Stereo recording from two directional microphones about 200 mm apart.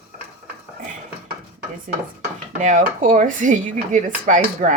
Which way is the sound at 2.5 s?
40° right (ahead or behind).